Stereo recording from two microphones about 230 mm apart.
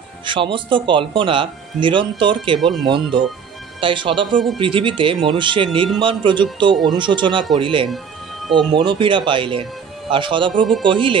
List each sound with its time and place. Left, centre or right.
0.2 s speech: right
2.6 s speech: centre
3.8 s speech: right
7.9 s music: centre
8.7 s speech: right